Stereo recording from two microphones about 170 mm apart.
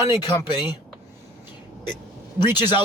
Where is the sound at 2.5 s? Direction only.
25° left (ahead or behind).